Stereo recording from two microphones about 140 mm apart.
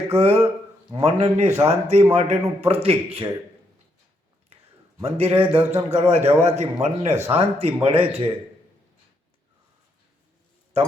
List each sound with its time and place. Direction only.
0.1 s a man's voice: 45° right (ahead or behind)
5.0 s a man's voice: 45° right (ahead or behind)